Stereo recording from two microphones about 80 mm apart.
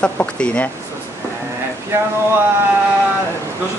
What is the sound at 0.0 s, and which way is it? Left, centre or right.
Speech, centre.